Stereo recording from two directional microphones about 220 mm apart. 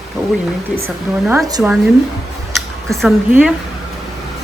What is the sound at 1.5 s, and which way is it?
Speech, 15° right (ahead or behind).